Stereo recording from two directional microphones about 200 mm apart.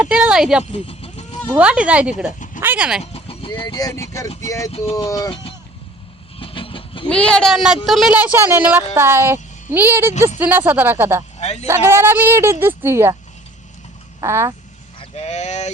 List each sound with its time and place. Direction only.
0.0 s speech: 5° right (ahead or behind)
0.6 s a sound: 30° left (ahead or behind)
1.5 s speech: 5° right (ahead or behind)
3.0 s speech: 30° left (ahead or behind); by 4.7 s 15° left (ahead or behind)
4.7 s speech: 30° left (ahead or behind)
5.0 s speech: 20° left (ahead or behind)
6.4 s vehicle: 25° left (ahead or behind)
7.1 s speech: 5° left (ahead or behind)
11.3 s speech: 35° left (ahead or behind)
11.6 s speech: 10° right (ahead or behind)
14.2 s speech: 15° right (ahead or behind)
14.9 s speech: 35° left (ahead or behind)